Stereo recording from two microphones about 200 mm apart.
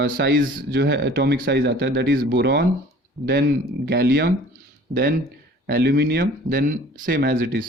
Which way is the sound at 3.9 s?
55° right (ahead or behind).